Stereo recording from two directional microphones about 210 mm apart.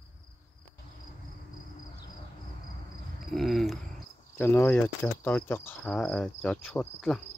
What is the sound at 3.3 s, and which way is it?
Speech, centre (ahead or behind).